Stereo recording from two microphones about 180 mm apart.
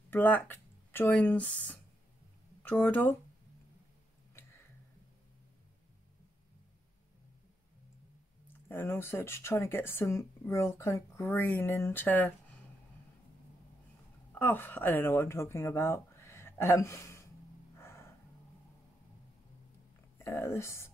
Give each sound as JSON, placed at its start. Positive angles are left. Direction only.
{"t": 0.1, "sound": "speech", "side_deg": 10}
{"t": 8.6, "sound": "speech", "side_deg": 15}
{"t": 14.3, "sound": "speech", "side_deg": 10}
{"t": 17.7, "sound": "gasp", "side_deg": 15}
{"t": 20.2, "sound": "speech", "side_deg": 15}